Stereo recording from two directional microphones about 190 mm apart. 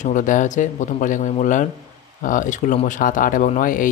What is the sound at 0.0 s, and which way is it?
Speech, 40° left (ahead or behind).